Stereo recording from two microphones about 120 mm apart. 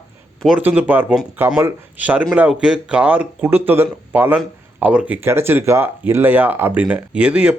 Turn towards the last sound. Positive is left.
turn(degrees=-10)  # may be behind; listen again after turning